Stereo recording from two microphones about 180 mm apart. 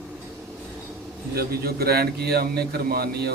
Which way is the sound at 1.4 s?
60° right (ahead or behind).